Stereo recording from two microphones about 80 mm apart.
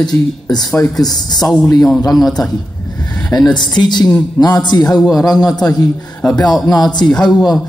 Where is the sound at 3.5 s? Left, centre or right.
Left.